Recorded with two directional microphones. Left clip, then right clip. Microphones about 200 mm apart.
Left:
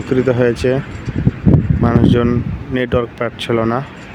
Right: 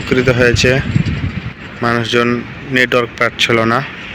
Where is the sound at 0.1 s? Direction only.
20° left (ahead or behind).